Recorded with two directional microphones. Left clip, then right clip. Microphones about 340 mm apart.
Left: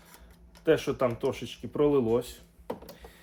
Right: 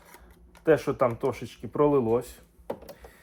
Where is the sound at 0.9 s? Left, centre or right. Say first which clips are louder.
Right 3 dB; centre.